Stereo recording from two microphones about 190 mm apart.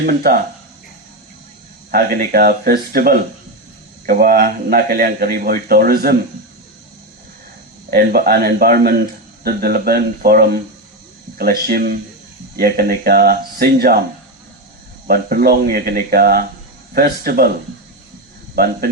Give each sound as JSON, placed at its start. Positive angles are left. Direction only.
{"t": 0.0, "sound": "a man's voice", "side_deg": -50}
{"t": 1.9, "sound": "a man's voice", "side_deg": -45}
{"t": 7.9, "sound": "a man's voice", "side_deg": -50}
{"t": 15.0, "sound": "a man's voice", "side_deg": -50}
{"t": 18.5, "sound": "a man's voice", "side_deg": -50}